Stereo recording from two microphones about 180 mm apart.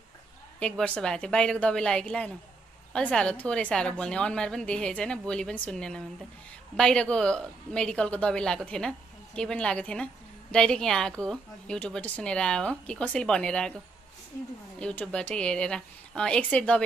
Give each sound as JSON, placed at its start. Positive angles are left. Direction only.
{"t": 0.6, "sound": "a woman's voice", "side_deg": 5}
{"t": 14.8, "sound": "speech", "side_deg": 5}